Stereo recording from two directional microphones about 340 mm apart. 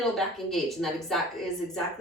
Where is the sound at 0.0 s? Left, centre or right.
Centre.